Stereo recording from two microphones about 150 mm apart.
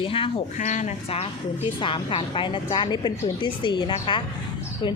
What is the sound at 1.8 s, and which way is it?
A woman's voice, 35° left (ahead or behind).